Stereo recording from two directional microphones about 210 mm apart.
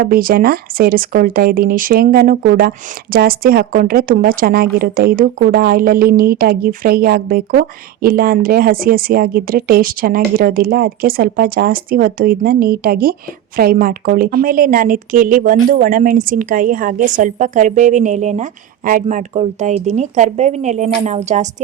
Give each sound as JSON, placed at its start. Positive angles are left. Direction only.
{"t": 0.0, "sound": "a woman's voice", "side_deg": -45}